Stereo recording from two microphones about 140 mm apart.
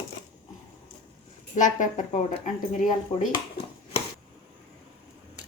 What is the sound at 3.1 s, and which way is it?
Cutlery, 45° left (ahead or behind).